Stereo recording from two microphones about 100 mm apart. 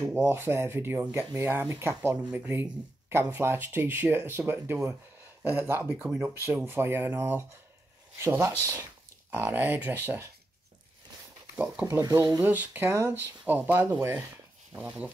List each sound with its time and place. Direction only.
0.0 s speech: 25° right (ahead or behind)
5.9 s speech: 10° right (ahead or behind)
6.2 s speech: 20° right (ahead or behind)
11.5 s speech: 10° right (ahead or behind)
12.0 s speech: 40° right (ahead or behind)
12.4 s speech: 20° right (ahead or behind)